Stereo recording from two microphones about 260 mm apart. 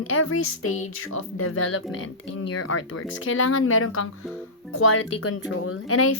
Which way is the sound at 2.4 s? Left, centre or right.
Left.